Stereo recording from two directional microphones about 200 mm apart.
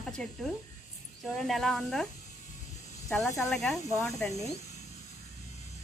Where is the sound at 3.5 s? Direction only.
Centre (ahead or behind).